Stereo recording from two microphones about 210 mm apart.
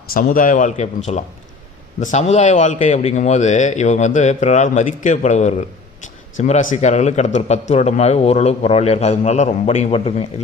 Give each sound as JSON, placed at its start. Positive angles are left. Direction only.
{"t": 0.1, "sound": "a man's voice", "side_deg": 40}